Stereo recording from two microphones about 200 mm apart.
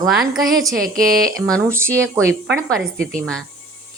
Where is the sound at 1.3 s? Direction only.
15° right (ahead or behind).